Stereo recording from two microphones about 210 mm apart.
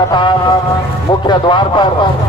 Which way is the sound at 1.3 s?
20° left (ahead or behind).